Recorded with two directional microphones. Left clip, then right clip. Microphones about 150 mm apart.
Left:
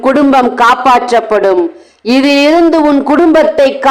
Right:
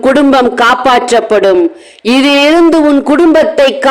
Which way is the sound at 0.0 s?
35° right (ahead or behind).